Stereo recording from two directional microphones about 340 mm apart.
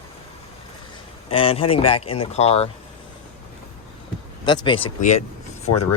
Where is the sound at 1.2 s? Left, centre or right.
Centre.